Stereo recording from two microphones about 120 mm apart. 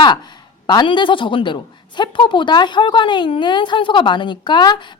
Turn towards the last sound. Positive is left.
turn(degrees=40)  # may be behind; listen again after turning